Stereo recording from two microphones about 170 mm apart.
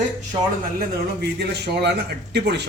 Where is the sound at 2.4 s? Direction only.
85° right.